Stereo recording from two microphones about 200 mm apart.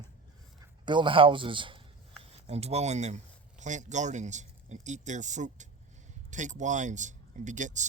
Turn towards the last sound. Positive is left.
turn(degrees=-35)  # may be behind; listen again after turning